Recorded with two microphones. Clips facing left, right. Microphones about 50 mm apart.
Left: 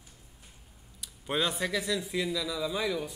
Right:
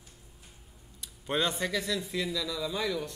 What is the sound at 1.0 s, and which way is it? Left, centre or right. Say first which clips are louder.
Speech: even; centre.